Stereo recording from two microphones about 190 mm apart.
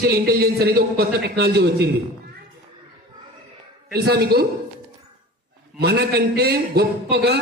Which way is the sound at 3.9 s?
60° right (ahead or behind).